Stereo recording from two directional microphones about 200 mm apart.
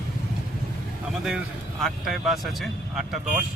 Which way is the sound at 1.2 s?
Centre (ahead or behind).